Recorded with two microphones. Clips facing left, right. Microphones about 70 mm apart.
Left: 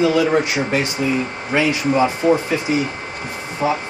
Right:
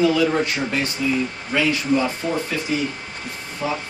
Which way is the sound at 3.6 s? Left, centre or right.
Left.